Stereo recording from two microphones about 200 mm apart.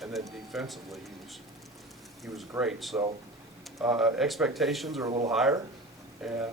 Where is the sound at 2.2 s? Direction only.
Centre (ahead or behind).